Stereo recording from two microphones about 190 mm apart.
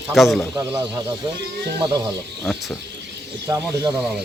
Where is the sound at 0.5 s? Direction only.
20° right (ahead or behind).